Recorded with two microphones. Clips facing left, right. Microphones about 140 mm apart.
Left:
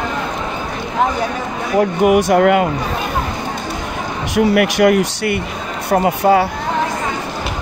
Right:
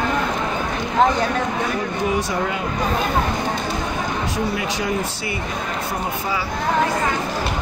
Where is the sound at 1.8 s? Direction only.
75° left (ahead or behind).